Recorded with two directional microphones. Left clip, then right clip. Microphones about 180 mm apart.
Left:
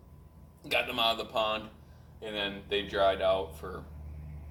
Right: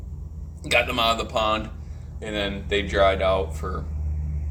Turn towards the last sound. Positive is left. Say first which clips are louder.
# right 6 dB
turn(degrees=20)  # may be behind; listen again after turning